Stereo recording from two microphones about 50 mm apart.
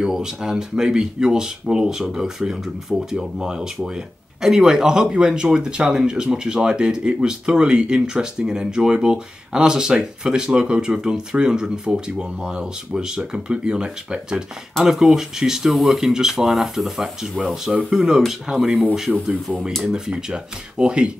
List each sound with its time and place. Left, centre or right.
0.0 s speech: centre
14.8 s speech: centre
19.2 s speech: centre
19.8 s speech: centre